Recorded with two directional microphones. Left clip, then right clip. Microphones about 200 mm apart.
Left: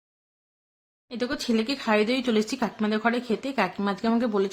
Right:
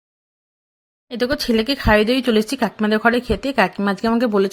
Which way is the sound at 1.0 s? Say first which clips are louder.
Right 9 dB; 35° right (ahead or behind).